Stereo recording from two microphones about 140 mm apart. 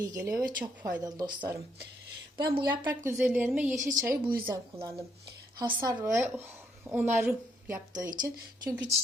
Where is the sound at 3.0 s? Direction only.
15° right (ahead or behind).